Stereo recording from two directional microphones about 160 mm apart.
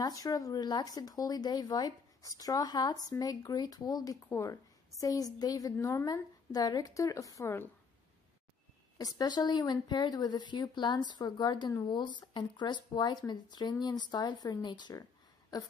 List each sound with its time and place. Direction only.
0.0 s speech: 25° left (ahead or behind)
8.9 s speech: 25° left (ahead or behind)